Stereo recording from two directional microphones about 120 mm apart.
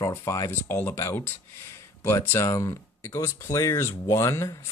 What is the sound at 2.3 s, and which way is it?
Speech, 25° left (ahead or behind).